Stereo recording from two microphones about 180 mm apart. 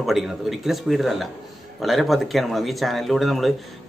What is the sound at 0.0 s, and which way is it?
Speech, centre (ahead or behind).